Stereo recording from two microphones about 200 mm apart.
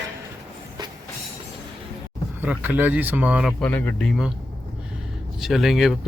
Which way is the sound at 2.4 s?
10° right (ahead or behind).